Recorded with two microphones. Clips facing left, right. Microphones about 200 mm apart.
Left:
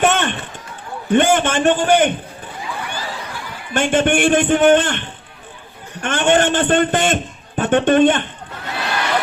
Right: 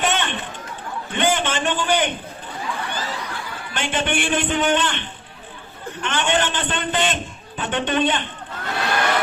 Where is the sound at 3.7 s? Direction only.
50° left (ahead or behind).